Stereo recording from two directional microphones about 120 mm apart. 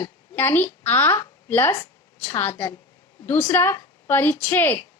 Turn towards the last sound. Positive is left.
turn(degrees=15)  # may be behind; listen again after turning